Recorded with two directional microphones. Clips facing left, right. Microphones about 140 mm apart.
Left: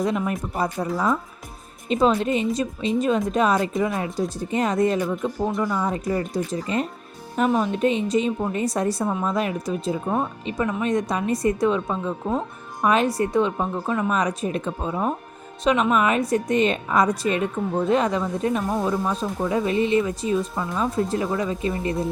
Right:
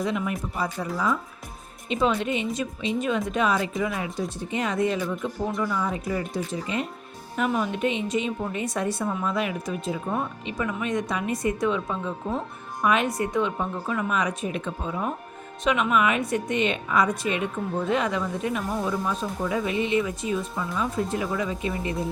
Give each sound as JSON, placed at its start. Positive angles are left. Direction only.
{"t": 0.0, "sound": "a woman's voice", "side_deg": 40}